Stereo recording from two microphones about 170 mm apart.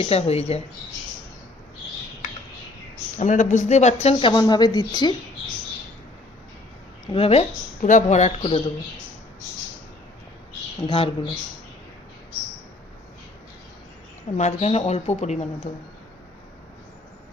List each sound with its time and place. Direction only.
0.0 s speech: 35° left (ahead or behind)
3.2 s speech: 45° left (ahead or behind); by 5.1 s 25° left (ahead or behind)
7.1 s speech: 35° left (ahead or behind)
10.8 s speech: 30° left (ahead or behind)
14.3 s speech: 40° left (ahead or behind)